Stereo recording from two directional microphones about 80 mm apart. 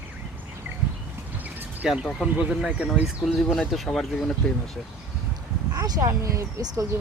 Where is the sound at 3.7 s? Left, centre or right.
Centre.